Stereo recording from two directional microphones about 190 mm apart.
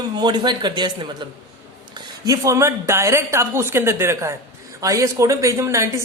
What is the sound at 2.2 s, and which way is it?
Speech, 15° right (ahead or behind).